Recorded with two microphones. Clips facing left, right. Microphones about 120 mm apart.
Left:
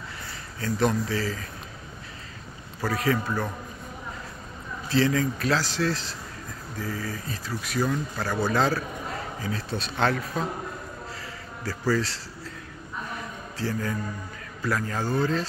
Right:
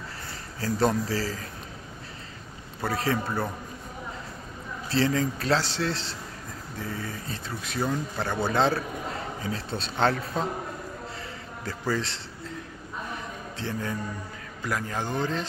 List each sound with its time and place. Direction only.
0.6 s speech: 30° right (ahead or behind)
2.8 s speech: 30° right (ahead or behind)
4.8 s speech: 30° right (ahead or behind)
11.6 s speech: 20° right (ahead or behind)
13.6 s speech: 25° right (ahead or behind)